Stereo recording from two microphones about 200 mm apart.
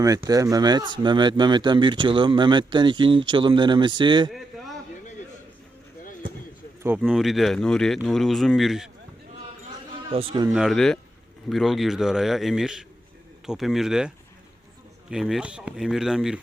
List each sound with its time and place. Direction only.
0.0 s speech: 15° right (ahead or behind)
4.3 s a sound: centre (ahead or behind)
6.8 s speech: 5° right (ahead or behind)
10.1 s speech: 30° right (ahead or behind)
10.5 s speech: centre (ahead or behind)
15.1 s speech: 5° right (ahead or behind)